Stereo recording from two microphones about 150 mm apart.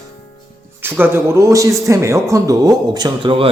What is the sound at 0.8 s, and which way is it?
Speech, 15° right (ahead or behind).